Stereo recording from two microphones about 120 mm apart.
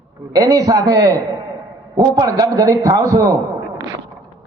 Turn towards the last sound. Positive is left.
turn(degrees=-30)  # may be behind; listen again after turning